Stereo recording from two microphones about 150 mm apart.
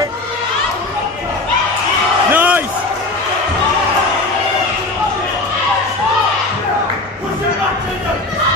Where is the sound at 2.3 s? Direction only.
10° right (ahead or behind).